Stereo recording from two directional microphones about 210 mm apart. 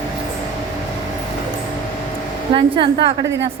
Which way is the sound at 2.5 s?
25° right (ahead or behind).